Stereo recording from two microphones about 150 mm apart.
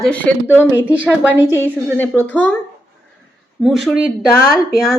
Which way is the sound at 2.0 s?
10° left (ahead or behind).